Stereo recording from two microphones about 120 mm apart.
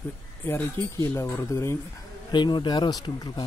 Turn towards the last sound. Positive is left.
turn(degrees=35)  # may be behind; listen again after turning